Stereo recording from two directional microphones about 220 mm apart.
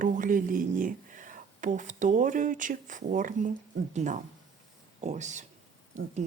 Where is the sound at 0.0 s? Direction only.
40° right (ahead or behind).